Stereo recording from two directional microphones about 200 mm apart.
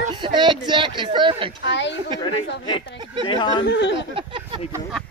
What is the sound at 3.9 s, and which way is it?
Speech, 25° right (ahead or behind).